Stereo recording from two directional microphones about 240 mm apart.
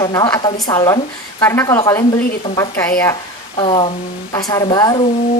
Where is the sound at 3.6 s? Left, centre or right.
Left.